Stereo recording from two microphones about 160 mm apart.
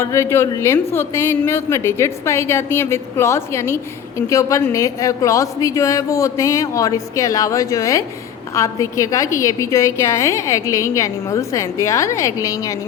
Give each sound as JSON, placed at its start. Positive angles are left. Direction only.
{"t": 0.0, "sound": "a woman's voice", "side_deg": 15}